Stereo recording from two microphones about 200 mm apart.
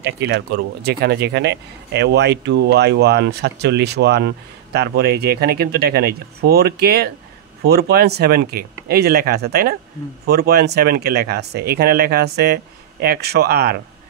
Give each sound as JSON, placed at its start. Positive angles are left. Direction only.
{"t": 0.0, "sound": "speech", "side_deg": -60}